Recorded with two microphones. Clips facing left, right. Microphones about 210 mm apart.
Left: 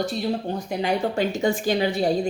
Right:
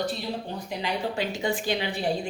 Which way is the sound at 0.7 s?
45° left (ahead or behind).